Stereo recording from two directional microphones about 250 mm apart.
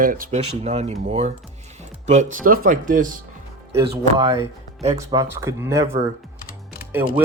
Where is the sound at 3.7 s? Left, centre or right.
Centre.